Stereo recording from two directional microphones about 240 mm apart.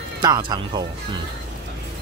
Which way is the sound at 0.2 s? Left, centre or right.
Centre.